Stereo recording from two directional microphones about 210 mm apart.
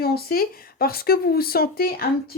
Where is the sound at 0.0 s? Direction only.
45° left (ahead or behind).